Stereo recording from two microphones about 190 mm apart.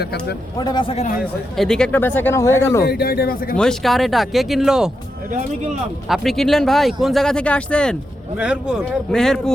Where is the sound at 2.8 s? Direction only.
55° left (ahead or behind).